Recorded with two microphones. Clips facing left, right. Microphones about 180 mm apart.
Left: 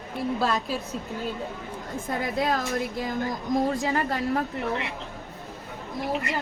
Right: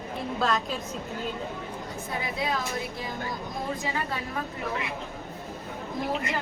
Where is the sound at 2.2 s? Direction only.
50° left (ahead or behind).